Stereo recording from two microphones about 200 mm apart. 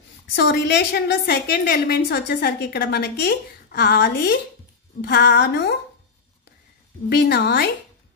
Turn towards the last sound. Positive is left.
turn(degrees=55)  # may be behind; listen again after turning